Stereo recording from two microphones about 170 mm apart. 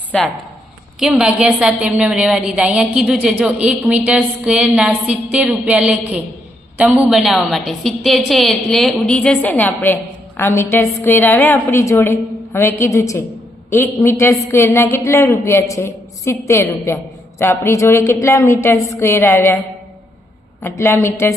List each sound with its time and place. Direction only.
0.1 s a woman's voice: 5° left (ahead or behind)
20.6 s a woman's voice: 15° left (ahead or behind)